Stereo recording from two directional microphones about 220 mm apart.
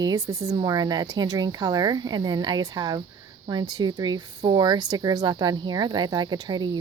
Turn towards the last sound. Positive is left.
turn(degrees=-20)  # may be behind; listen again after turning